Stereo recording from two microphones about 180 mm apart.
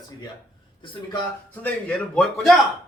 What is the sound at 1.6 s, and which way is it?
Speech, 5° left (ahead or behind).